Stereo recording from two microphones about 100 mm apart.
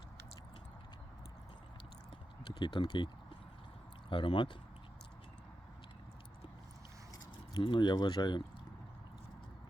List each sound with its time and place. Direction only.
2.4 s speech: 50° left (ahead or behind)
4.1 s speech: 55° left (ahead or behind)
7.5 s speech: 50° left (ahead or behind)